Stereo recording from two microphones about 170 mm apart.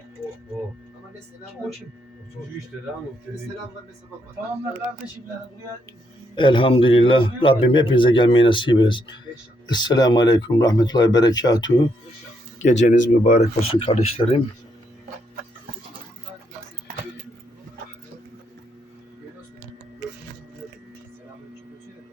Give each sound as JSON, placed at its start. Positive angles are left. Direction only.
{"t": 2.4, "sound": "speech", "side_deg": 0}
{"t": 6.3, "sound": "a man's voice", "side_deg": 30}
{"t": 12.8, "sound": "speech", "side_deg": 50}